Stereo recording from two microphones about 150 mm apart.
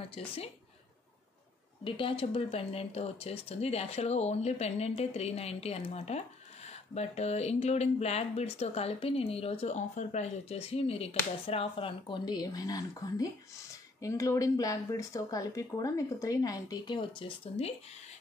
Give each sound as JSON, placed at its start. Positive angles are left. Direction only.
{"t": 1.9, "sound": "speech", "side_deg": 35}